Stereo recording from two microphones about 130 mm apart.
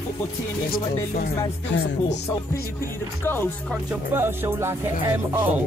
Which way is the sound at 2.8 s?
15° left (ahead or behind).